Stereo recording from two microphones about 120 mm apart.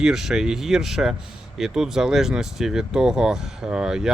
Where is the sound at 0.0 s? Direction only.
5° right (ahead or behind).